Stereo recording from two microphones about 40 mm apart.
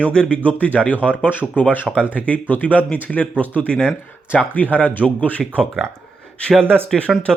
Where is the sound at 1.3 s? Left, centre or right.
Left.